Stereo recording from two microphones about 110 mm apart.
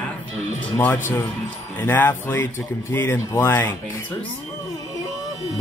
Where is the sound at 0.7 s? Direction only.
20° left (ahead or behind).